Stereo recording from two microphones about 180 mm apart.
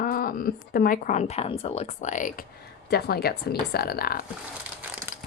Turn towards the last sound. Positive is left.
turn(degrees=45)  # may be behind; listen again after turning